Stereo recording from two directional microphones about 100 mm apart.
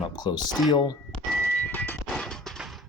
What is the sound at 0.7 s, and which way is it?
Speech, 45° left (ahead or behind).